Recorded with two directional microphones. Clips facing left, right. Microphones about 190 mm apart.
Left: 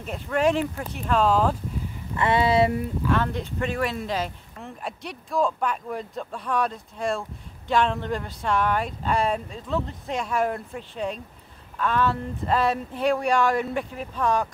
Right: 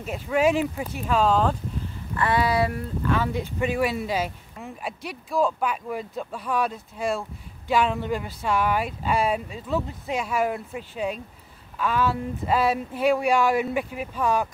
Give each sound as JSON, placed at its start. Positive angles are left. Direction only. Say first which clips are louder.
{"t": 0.0, "sound": "speech", "louder": "right 1 dB", "side_deg": -5}
{"t": 2.1, "sound": "speech", "louder": "left 2 dB", "side_deg": 25}
{"t": 3.0, "sound": "speech", "louder": "right 3 dB", "side_deg": 0}